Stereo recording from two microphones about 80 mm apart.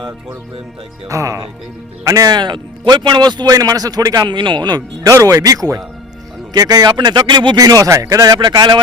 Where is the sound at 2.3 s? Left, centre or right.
Right.